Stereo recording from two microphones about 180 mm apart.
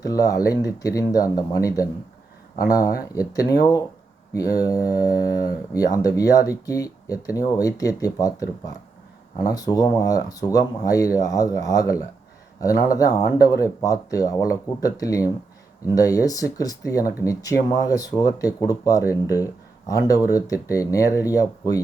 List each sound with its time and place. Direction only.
0.0 s speech: 20° left (ahead or behind)